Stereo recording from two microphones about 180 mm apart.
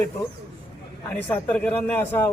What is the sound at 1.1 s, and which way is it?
Speech, 10° left (ahead or behind).